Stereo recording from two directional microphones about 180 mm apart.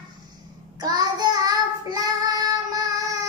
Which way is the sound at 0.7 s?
20° right (ahead or behind).